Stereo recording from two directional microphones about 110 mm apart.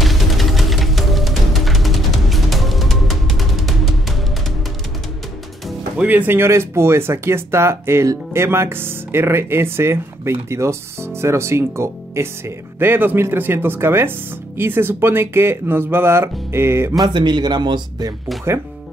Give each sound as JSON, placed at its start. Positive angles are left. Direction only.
{"t": 0.0, "sound": "music", "side_deg": 0}
{"t": 6.0, "sound": "speech", "side_deg": -15}
{"t": 17.0, "sound": "speech", "side_deg": -45}